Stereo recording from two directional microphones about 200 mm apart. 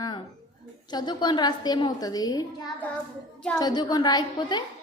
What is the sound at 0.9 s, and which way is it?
A woman's voice, 20° left (ahead or behind).